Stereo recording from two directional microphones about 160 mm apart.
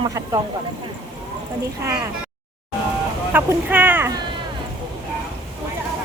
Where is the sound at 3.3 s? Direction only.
10° right (ahead or behind).